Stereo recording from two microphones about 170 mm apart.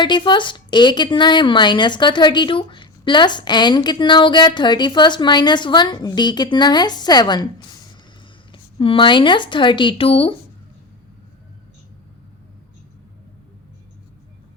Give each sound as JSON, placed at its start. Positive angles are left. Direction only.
{"t": 0.0, "sound": "a woman's voice", "side_deg": 25}
{"t": 8.5, "sound": "a woman's voice", "side_deg": 30}